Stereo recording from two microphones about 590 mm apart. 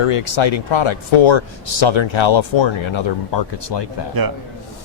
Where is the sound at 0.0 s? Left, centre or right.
Left.